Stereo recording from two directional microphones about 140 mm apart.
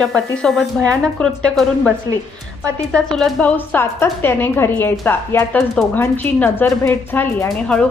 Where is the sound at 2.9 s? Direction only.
5° left (ahead or behind).